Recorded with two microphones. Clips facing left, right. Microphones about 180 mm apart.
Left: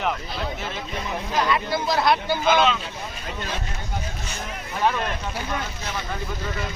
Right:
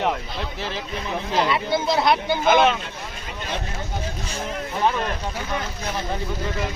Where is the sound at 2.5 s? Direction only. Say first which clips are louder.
Right 3 dB; 50° right (ahead or behind).